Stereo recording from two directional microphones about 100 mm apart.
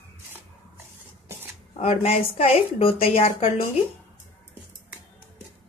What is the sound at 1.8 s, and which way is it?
A woman's voice, 90° left.